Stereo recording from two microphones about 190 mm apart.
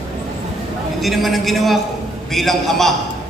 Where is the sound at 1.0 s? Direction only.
Centre (ahead or behind).